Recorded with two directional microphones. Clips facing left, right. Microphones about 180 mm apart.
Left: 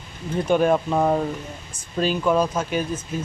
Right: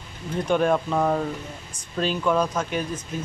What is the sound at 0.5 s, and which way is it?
Speech, 5° left (ahead or behind).